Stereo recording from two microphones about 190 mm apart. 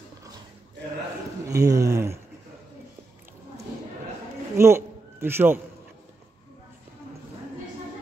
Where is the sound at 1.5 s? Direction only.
15° right (ahead or behind).